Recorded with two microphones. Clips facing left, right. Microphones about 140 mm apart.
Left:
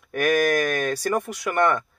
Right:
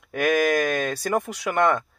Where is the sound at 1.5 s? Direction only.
15° right (ahead or behind).